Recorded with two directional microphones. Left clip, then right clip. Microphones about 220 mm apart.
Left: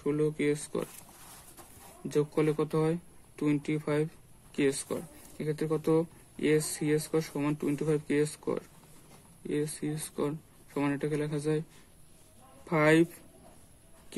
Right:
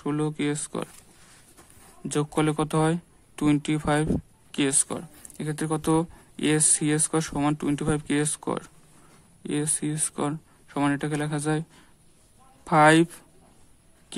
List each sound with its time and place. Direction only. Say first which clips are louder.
0.0 s speech: right 1 dB; 40° right (ahead or behind)
2.0 s speech: right 3 dB; 40° right (ahead or behind)
12.6 s speech: right 7 dB; 40° right (ahead or behind)